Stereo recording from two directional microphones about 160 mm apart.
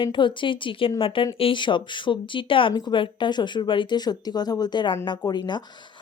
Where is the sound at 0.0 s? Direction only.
30° left (ahead or behind).